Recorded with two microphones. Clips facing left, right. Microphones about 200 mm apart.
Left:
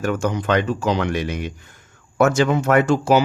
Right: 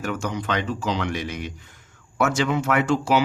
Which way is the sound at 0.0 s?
50° left (ahead or behind).